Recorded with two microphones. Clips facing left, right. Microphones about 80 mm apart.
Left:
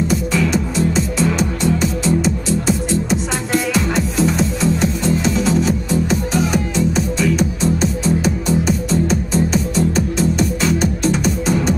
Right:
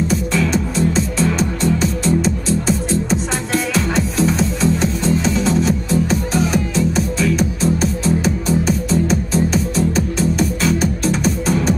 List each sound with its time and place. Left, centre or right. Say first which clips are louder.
0.1 s music: even; centre